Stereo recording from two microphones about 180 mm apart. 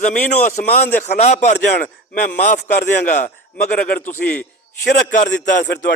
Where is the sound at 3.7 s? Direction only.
50° left (ahead or behind).